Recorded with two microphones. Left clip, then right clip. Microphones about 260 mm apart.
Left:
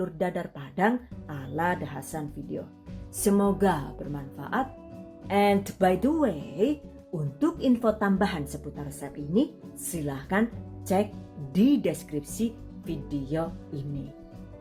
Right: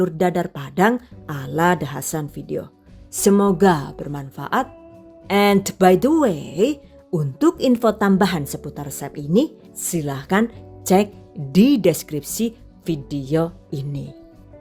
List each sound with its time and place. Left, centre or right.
0.0 s a woman's voice: right